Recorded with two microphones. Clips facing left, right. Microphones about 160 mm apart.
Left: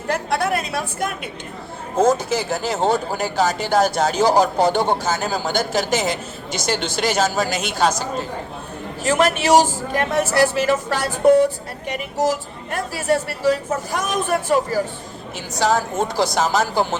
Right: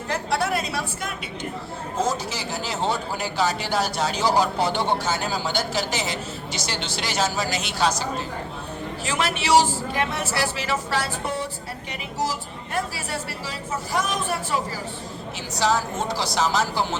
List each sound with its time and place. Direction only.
0.1 s a sound: 55° left (ahead or behind)
2.0 s speech: 50° left (ahead or behind)
9.0 s speech: 45° left (ahead or behind)